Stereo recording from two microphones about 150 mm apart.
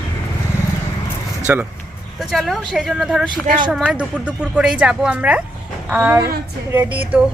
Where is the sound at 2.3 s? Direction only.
Centre (ahead or behind).